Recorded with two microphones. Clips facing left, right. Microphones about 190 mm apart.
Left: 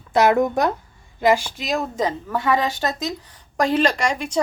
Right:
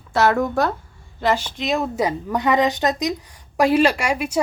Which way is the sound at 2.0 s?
20° right (ahead or behind).